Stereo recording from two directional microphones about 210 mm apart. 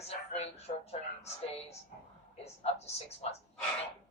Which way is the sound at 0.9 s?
30° left (ahead or behind).